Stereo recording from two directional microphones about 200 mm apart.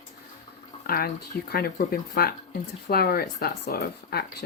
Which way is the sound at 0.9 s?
50° left (ahead or behind).